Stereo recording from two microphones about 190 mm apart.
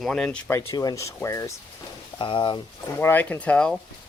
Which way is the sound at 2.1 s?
25° left (ahead or behind).